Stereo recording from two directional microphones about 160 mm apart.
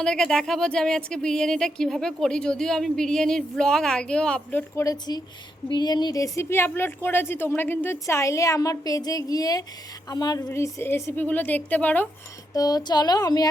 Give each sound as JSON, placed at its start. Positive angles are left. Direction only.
{"t": 0.0, "sound": "speech", "side_deg": 5}
{"t": 4.7, "sound": "a woman's voice", "side_deg": 20}
{"t": 12.5, "sound": "speech", "side_deg": 25}